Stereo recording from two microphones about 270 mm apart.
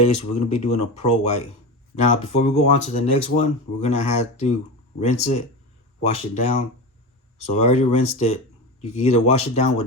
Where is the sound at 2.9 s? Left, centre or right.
Left.